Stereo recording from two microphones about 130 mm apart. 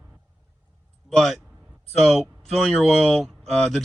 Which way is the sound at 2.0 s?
Centre (ahead or behind).